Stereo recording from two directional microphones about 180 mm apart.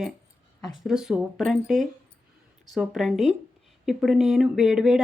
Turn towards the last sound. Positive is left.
turn(degrees=-5)  # may be behind; listen again after turning